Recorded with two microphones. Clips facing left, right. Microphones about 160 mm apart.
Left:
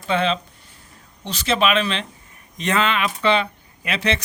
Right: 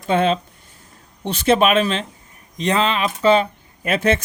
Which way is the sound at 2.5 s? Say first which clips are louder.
Right 2 dB; 35° right (ahead or behind).